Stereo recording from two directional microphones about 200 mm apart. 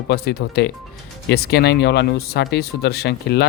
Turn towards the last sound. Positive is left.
turn(degrees=55)  # may be behind; listen again after turning